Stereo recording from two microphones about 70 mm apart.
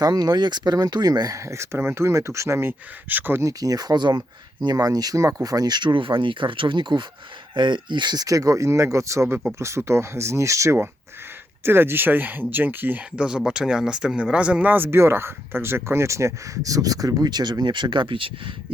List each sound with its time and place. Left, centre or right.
0.0 s speech: right
1.4 s speech: right
3.4 s speech: right
4.6 s speech: right
6.9 s speech: right
11.6 s speech: right
13.1 s speech: centre; by 17.9 s right